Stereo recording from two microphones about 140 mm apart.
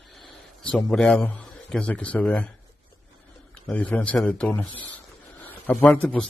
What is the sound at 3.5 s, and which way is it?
A man's voice, 10° left (ahead or behind).